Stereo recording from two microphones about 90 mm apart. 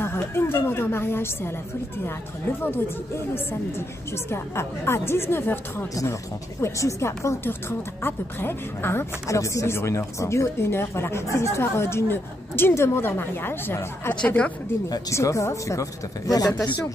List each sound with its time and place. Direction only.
0.0 s speech: 25° left (ahead or behind)
4.3 s a woman's voice: 30° left (ahead or behind)
14.2 s a woman's voice: 15° left (ahead or behind)
14.9 s a woman's voice: 35° left (ahead or behind)